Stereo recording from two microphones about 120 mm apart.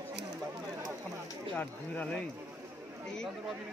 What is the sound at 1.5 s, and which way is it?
Speech, 10° left (ahead or behind).